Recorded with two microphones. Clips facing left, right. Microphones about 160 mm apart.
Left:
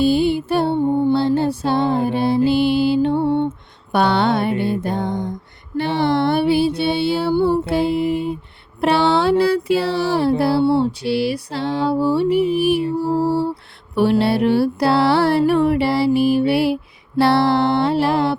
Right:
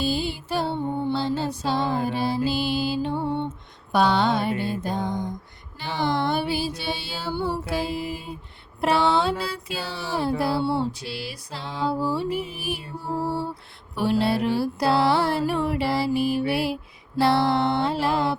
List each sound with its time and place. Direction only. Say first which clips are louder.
0.0 s music: left 10 dB; 60° left (ahead or behind)
8.8 s mantra: left 5 dB; 70° left (ahead or behind)